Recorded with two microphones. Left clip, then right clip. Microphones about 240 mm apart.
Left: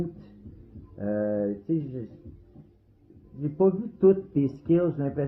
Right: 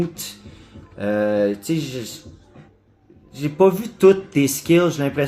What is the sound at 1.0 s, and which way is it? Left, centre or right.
Speech, right.